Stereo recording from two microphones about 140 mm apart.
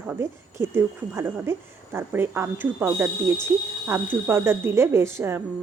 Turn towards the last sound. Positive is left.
turn(degrees=-15)  # may be behind; listen again after turning